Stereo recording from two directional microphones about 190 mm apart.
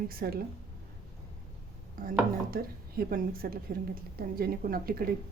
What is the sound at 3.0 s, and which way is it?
A woman's voice, 50° right (ahead or behind).